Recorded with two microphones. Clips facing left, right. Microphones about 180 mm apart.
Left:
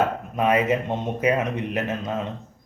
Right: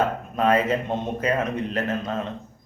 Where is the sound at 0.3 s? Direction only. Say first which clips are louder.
Even; 15° left (ahead or behind).